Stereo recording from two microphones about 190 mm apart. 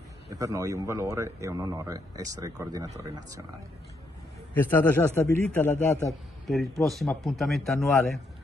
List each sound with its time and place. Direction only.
0.3 s a man's voice: 15° right (ahead or behind)
4.6 s a man's voice: 10° left (ahead or behind)
6.4 s speech: centre (ahead or behind)